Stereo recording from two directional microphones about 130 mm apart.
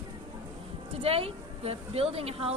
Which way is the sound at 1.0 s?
50° right (ahead or behind).